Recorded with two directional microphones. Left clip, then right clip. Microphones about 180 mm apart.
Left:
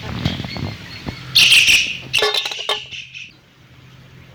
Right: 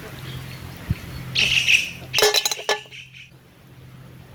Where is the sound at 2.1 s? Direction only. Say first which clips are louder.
Even; 30° right (ahead or behind).